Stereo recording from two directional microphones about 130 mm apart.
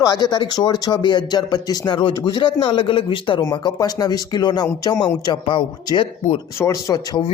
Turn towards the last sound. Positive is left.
turn(degrees=30)  # may be behind; listen again after turning